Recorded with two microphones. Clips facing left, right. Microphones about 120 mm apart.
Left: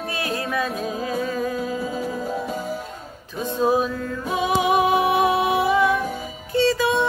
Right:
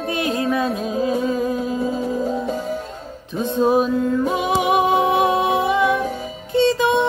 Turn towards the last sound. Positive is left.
turn(degrees=-20)  # may be behind; listen again after turning